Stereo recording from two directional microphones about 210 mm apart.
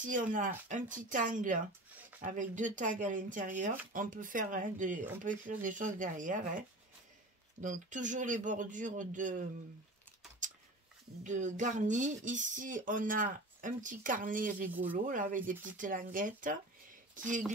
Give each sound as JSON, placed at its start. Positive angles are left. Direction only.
{"t": 0.0, "sound": "speech", "side_deg": -40}
{"t": 7.6, "sound": "speech", "side_deg": -35}
{"t": 10.4, "sound": "a sound", "side_deg": -35}
{"t": 11.2, "sound": "speech", "side_deg": -35}
{"t": 14.7, "sound": "speech", "side_deg": -10}
{"t": 15.0, "sound": "speech", "side_deg": -40}